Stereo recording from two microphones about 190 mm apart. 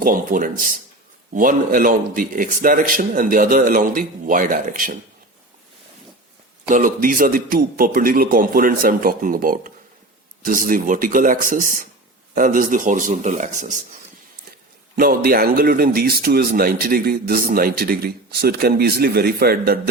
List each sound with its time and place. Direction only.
0.0 s a man's voice: 45° right (ahead or behind)
6.7 s a man's voice: 45° right (ahead or behind)
14.9 s a man's voice: 50° right (ahead or behind)